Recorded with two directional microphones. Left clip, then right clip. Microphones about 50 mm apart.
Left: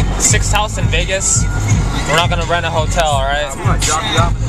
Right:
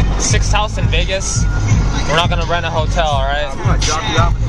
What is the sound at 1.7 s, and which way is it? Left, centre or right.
Speech, centre.